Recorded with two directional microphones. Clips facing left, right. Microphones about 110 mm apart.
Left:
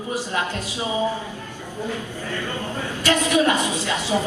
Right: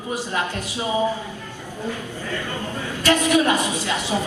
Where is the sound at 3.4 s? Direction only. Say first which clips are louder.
Even; 15° right (ahead or behind).